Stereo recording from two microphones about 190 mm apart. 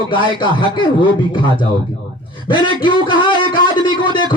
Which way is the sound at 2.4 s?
25° left (ahead or behind).